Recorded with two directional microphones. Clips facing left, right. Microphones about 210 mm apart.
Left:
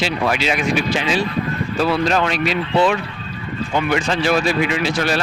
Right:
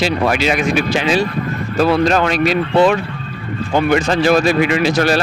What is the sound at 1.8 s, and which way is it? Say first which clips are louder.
Speech: right 5 dB; 45° right (ahead or behind).